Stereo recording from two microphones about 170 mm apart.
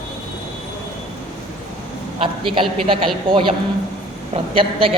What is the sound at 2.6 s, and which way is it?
Speech, 30° right (ahead or behind).